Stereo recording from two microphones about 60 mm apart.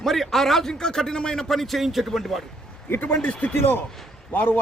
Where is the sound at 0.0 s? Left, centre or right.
Centre.